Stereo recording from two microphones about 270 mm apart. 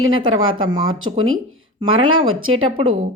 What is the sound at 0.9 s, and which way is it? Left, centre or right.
Speech, right.